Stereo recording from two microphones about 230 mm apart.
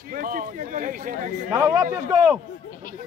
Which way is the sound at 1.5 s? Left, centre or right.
Centre.